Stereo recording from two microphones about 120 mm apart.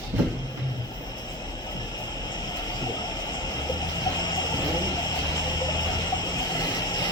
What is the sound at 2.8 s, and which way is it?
Vehicle, 35° left (ahead or behind).